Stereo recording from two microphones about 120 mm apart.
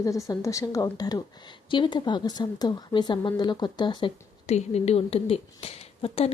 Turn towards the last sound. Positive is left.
turn(degrees=55)  # may be behind; listen again after turning